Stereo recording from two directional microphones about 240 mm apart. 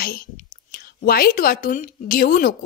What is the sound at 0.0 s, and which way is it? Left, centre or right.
A woman's voice, left.